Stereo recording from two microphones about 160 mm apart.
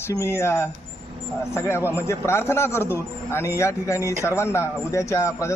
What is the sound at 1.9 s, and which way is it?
Speech, 15° left (ahead or behind).